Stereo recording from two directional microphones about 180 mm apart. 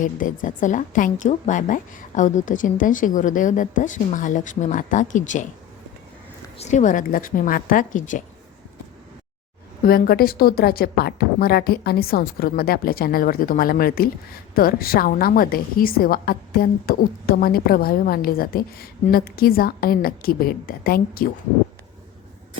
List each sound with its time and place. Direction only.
0.0 s a woman's voice: 45° left (ahead or behind)
6.6 s a woman's voice: 40° left (ahead or behind)
9.8 s a woman's voice: 55° left (ahead or behind)